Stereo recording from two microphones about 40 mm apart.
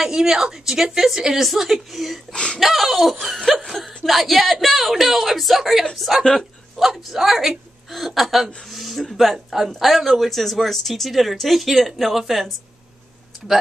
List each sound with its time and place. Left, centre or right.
0.0 s a woman's voice: centre
2.3 s speech: left
2.6 s a woman's voice: centre